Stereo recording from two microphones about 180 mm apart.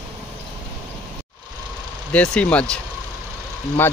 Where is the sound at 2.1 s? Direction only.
5° left (ahead or behind).